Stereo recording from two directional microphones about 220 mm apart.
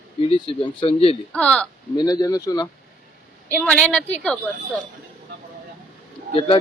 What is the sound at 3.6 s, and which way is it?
Speech, 5° left (ahead or behind).